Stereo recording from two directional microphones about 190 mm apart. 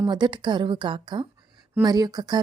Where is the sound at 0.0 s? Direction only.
25° right (ahead or behind).